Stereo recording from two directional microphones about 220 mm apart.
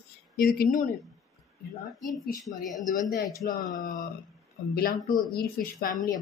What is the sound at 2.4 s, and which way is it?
Speech, centre (ahead or behind).